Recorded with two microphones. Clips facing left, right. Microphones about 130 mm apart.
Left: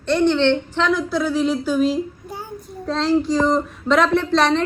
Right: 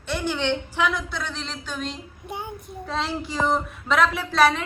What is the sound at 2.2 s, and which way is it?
Child singing, 20° right (ahead or behind).